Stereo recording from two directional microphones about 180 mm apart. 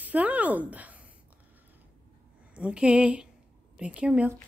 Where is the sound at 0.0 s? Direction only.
10° right (ahead or behind).